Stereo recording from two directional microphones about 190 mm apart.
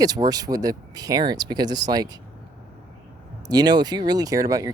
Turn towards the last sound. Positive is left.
turn(degrees=-20)  # may be behind; listen again after turning